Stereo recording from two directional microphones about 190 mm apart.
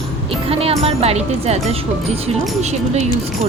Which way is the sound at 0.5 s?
30° right (ahead or behind).